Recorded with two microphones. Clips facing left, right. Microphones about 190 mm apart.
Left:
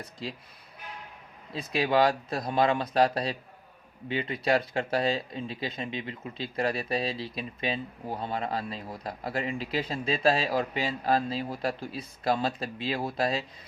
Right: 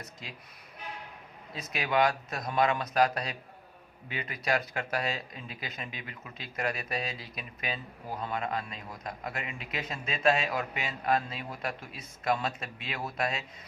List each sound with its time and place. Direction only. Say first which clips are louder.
0.0 s speech: left 8 dB; 30° left (ahead or behind)
1.5 s speech: left 4 dB; 30° left (ahead or behind)